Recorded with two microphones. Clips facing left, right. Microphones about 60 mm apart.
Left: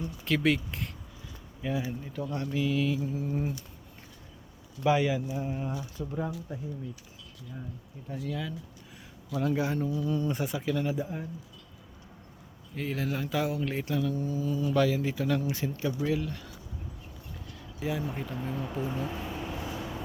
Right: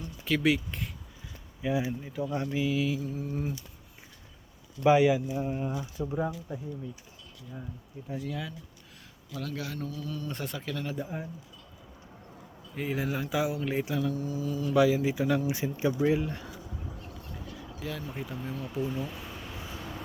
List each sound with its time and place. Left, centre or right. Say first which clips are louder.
0.3 s speech: even; centre
4.8 s speech: right 4 dB; centre
8.0 s speech: left 1 dB; centre
9.3 s speech: left 8 dB; left
10.3 s speech: left 5 dB; centre
11.0 s speech: left 1 dB; centre
12.7 s speech: right 1 dB; centre
14.8 s speech: right 5 dB; centre
17.4 s a sound: right 4 dB; centre
17.7 s speech: left 5 dB; centre
18.1 s speech: left 2 dB; centre
19.6 s vehicle: left 5 dB; left